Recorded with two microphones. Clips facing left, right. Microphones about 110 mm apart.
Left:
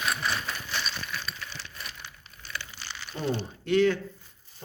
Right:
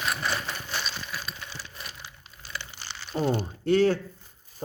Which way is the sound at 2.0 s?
30° right (ahead or behind).